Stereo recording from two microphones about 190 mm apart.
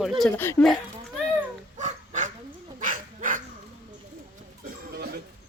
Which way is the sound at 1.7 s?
40° right (ahead or behind).